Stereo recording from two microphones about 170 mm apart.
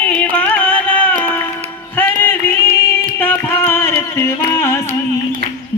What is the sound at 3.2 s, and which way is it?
Music, 10° left (ahead or behind).